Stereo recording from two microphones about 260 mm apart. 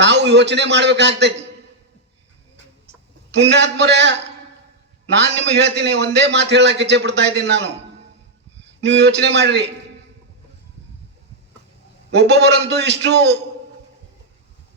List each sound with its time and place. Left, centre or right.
0.0 s a man's voice: right
3.3 s a man's voice: right
8.8 s a man's voice: right
12.1 s a man's voice: right